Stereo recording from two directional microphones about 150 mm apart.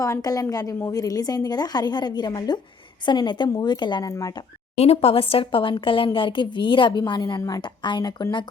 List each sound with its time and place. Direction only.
0.0 s a woman's voice: 25° left (ahead or behind)
4.8 s speech: 40° left (ahead or behind)